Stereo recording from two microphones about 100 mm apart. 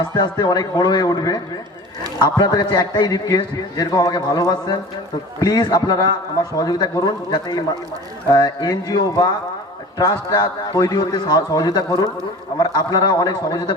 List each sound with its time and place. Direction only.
0.2 s a man's voice: 45° left (ahead or behind)